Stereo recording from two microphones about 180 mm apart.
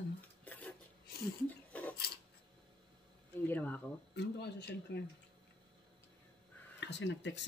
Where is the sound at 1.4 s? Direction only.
10° left (ahead or behind).